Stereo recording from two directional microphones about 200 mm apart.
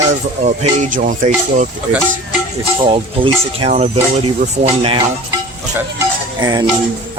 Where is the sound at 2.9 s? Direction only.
30° right (ahead or behind).